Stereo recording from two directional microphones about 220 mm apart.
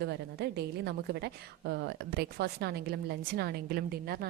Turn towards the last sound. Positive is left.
turn(degrees=-45)  # may be behind; listen again after turning